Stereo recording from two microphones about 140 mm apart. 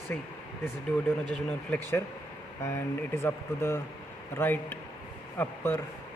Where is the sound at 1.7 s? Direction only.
15° left (ahead or behind).